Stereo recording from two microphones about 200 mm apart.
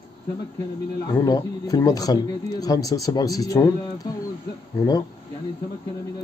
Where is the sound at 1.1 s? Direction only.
15° left (ahead or behind).